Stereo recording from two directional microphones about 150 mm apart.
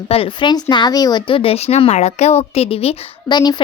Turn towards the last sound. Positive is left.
turn(degrees=30)  # may be behind; listen again after turning